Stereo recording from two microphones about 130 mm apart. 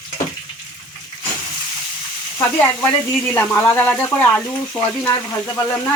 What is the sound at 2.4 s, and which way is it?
Speech, 15° left (ahead or behind).